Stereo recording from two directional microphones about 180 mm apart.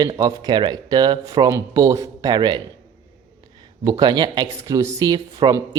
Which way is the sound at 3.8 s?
20° right (ahead or behind).